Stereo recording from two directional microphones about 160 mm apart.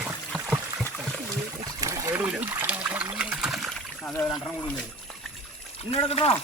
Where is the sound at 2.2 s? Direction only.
10° right (ahead or behind).